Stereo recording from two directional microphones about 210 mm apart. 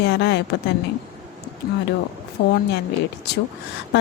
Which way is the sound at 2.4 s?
60° left (ahead or behind).